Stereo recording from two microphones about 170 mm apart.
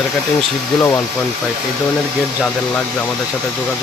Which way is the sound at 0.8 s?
20° left (ahead or behind).